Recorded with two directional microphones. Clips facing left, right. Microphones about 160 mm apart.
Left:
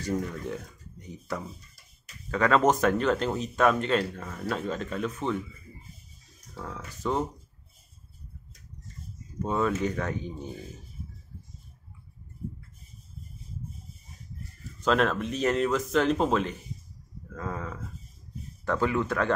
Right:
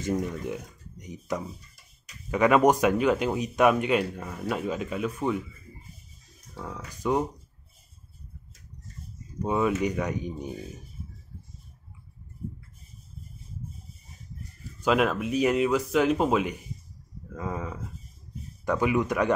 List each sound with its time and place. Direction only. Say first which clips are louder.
0.0 s speech: right 2 dB; 15° right (ahead or behind)
6.5 s speech: right 1 dB; 10° right (ahead or behind)
9.4 s speech: right 2 dB; 15° right (ahead or behind)
14.8 s speech: right 1 dB; 10° right (ahead or behind)